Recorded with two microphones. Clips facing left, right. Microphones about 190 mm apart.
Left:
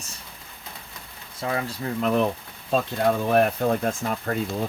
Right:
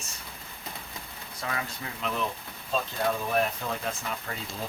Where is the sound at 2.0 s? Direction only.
50° left (ahead or behind).